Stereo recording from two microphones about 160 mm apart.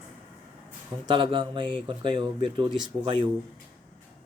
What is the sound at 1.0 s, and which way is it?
Speech, 30° right (ahead or behind).